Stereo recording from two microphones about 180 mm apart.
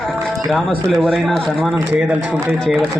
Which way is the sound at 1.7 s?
10° right (ahead or behind).